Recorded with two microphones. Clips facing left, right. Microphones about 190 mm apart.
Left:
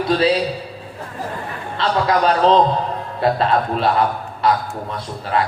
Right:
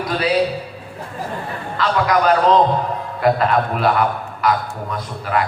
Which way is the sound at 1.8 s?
30° left (ahead or behind).